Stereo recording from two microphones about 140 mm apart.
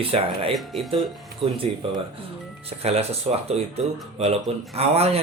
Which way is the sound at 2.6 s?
45° right (ahead or behind).